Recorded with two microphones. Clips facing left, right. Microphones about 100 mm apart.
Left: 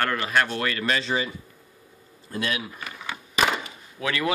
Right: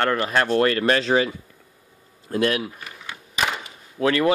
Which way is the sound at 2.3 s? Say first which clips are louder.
Right 7 dB; 60° right (ahead or behind).